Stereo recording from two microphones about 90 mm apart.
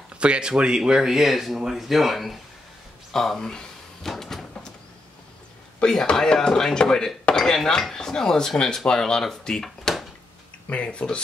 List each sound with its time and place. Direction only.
0.2 s speech: 10° right (ahead or behind)
3.1 s a sound: 5° left (ahead or behind)
5.8 s speech: 10° left (ahead or behind)